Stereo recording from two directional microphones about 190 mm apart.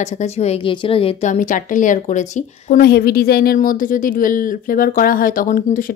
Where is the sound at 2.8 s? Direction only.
55° left (ahead or behind).